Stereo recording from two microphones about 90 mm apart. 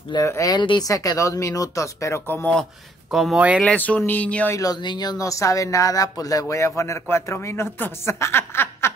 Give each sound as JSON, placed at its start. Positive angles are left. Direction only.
{"t": 0.2, "sound": "speech", "side_deg": 40}
{"t": 0.6, "sound": "speech", "side_deg": 55}
{"t": 0.8, "sound": "speech", "side_deg": 40}
{"t": 3.1, "sound": "speech", "side_deg": 0}
{"t": 3.3, "sound": "speech", "side_deg": -15}
{"t": 3.6, "sound": "speech", "side_deg": 15}
{"t": 4.5, "sound": "speech", "side_deg": 40}
{"t": 4.8, "sound": "speech", "side_deg": 50}